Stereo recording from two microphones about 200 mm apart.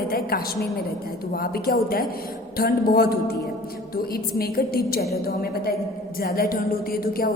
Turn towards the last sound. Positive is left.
turn(degrees=45)  # may be behind; listen again after turning